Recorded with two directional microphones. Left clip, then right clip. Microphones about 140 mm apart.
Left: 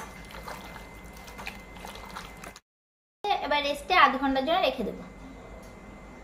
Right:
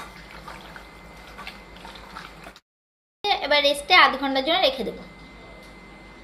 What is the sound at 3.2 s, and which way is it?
A woman's voice, 20° right (ahead or behind).